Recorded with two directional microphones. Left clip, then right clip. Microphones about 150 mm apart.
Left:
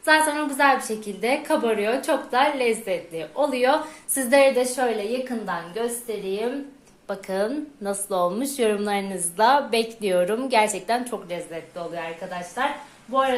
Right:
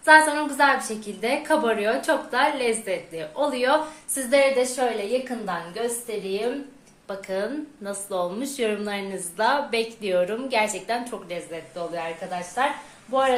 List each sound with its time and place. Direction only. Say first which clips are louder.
0.0 s a woman's voice: right 3 dB; 25° left (ahead or behind)
4.2 s speech: left 2 dB; 40° left (ahead or behind)
5.5 s a woman's voice: left 1 dB; 25° left (ahead or behind)
7.1 s speech: left 2 dB; 35° left (ahead or behind)